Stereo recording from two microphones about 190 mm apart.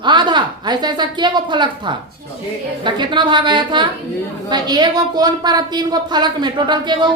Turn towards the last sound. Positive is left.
turn(degrees=-25)  # may be behind; listen again after turning